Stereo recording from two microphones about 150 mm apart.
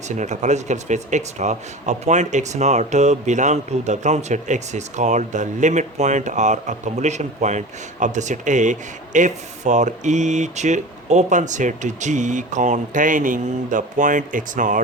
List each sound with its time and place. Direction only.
0.1 s speech: 50° right (ahead or behind)